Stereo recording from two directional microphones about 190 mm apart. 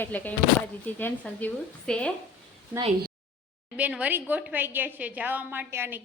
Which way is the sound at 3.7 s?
5° right (ahead or behind).